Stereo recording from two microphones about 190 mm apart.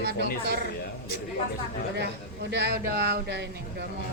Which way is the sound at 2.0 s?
60° right (ahead or behind).